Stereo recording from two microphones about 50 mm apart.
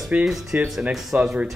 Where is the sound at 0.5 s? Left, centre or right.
Right.